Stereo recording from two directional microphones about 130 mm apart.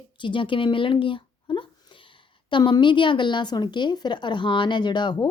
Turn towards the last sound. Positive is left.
turn(degrees=35)  # may be behind; listen again after turning